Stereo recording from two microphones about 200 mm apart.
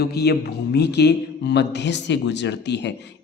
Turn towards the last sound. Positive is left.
turn(degrees=60)  # may be behind; listen again after turning